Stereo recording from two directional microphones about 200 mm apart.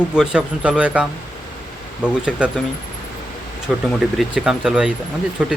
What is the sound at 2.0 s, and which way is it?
Speech, 5° right (ahead or behind).